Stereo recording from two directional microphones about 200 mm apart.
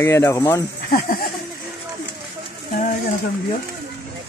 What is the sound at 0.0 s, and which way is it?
Speech, 15° left (ahead or behind).